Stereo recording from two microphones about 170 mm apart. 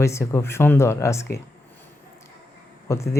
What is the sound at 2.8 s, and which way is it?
Speech, 15° left (ahead or behind).